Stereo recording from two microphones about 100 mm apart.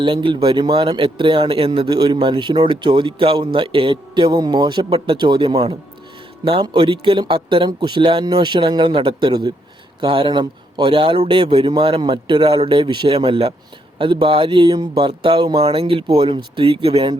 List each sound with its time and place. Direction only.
0.0 s a man's voice: 55° right (ahead or behind)
1.9 s a man's voice: 50° right (ahead or behind)
7.7 s a man's voice: 45° right (ahead or behind)
15.6 s a man's voice: 70° right (ahead or behind)